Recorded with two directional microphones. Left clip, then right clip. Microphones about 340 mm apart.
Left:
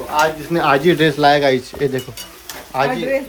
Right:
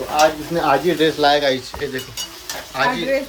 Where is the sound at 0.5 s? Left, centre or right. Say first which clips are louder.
Left 3 dB; left.